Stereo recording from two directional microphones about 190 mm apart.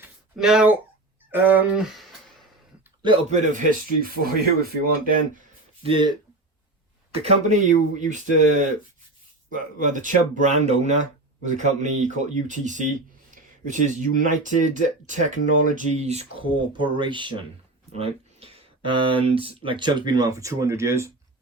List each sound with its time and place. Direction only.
0.3 s speech: 5° right (ahead or behind)
3.2 s speech: 40° right (ahead or behind)
5.8 s speech: 25° right (ahead or behind)
9.5 s speech: 45° right (ahead or behind); by 17.4 s 25° right (ahead or behind)
17.9 s a sound: 30° right (ahead or behind)
19.0 s speech: 30° right (ahead or behind)